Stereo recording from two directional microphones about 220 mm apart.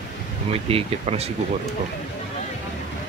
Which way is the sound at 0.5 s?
25° right (ahead or behind).